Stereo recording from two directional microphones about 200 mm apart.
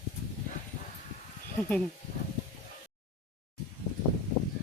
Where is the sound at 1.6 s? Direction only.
5° left (ahead or behind).